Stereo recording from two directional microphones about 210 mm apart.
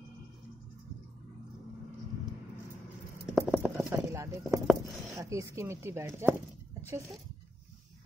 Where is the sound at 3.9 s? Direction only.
15° right (ahead or behind).